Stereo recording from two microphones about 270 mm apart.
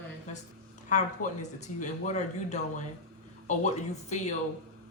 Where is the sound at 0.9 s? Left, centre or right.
Left.